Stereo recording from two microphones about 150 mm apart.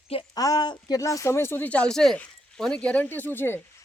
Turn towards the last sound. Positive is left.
turn(degrees=15)  # may be behind; listen again after turning